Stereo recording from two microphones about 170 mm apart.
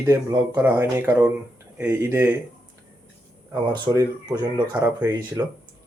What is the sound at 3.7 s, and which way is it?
Speech, 25° right (ahead or behind).